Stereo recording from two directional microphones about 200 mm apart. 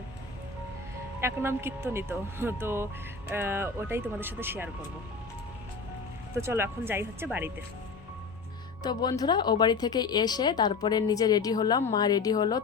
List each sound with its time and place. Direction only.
1.2 s speech: 10° right (ahead or behind)
6.3 s speech: 15° right (ahead or behind)
8.8 s speech: 20° left (ahead or behind)